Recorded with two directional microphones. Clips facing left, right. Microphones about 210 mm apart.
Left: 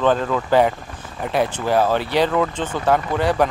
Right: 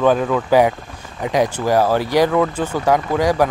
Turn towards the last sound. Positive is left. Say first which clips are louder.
# right 2 dB
turn(degrees=-10)  # may be behind; listen again after turning